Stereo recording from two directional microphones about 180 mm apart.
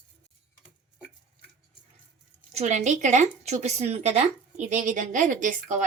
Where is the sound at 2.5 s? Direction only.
40° right (ahead or behind).